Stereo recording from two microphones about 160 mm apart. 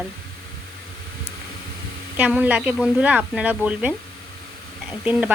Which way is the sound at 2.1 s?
10° right (ahead or behind).